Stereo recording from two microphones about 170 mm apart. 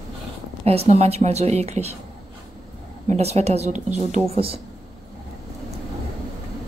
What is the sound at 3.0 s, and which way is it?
A woman's voice, 40° right (ahead or behind).